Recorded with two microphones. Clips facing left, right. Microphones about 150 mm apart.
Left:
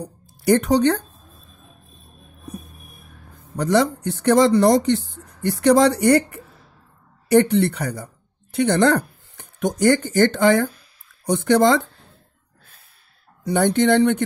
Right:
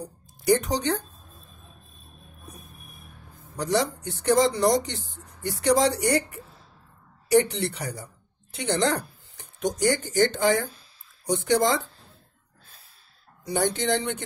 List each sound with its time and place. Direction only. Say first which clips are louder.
0.0 s speech: left 5 dB; 65° left (ahead or behind)
3.5 s speech: left 7 dB; 60° left (ahead or behind)
13.5 s speech: left 8 dB; 60° left (ahead or behind)